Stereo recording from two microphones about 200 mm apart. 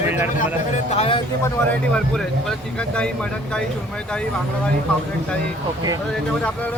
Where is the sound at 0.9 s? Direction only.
30° left (ahead or behind).